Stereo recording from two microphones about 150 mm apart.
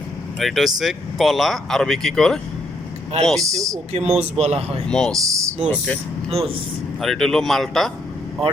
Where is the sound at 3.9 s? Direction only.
45° right (ahead or behind).